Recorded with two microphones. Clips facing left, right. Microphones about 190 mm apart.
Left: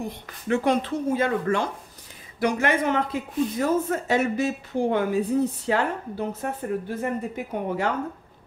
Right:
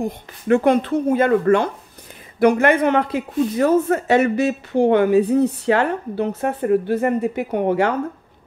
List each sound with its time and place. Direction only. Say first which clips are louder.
0.0 s speech: right 7 dB; 55° right (ahead or behind); by 7.9 s 75° right (ahead or behind)